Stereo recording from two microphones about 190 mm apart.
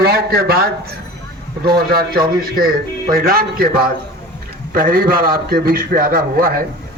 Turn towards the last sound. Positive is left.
turn(degrees=-50)  # may be behind; listen again after turning